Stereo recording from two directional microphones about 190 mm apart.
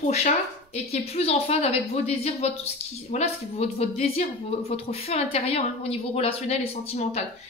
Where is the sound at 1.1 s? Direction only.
35° left (ahead or behind).